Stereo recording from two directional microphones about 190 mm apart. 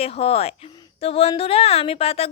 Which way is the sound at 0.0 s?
30° left (ahead or behind).